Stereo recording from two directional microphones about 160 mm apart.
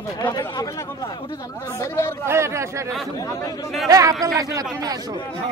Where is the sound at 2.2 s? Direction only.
15° right (ahead or behind).